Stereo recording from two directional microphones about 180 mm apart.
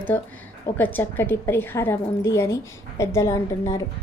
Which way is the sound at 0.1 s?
10° left (ahead or behind).